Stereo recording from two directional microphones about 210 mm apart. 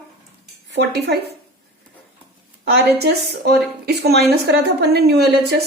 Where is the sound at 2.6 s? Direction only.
50° right (ahead or behind).